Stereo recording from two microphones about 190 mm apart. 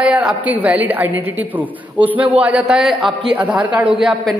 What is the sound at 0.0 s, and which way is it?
A woman's voice, 5° right (ahead or behind).